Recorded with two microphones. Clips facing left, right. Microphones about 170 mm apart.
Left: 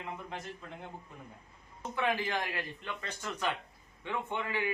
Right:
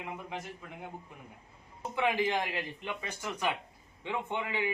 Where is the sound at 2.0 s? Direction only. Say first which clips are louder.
Right 3 dB; 15° right (ahead or behind).